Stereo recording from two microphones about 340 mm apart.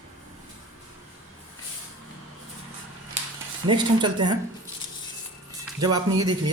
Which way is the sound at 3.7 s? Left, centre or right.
Centre.